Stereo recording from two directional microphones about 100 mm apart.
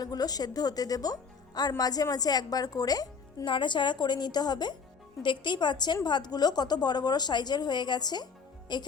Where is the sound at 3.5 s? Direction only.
55° left (ahead or behind).